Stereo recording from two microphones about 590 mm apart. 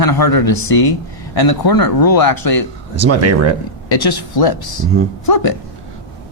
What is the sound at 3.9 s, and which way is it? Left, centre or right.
Speech, left.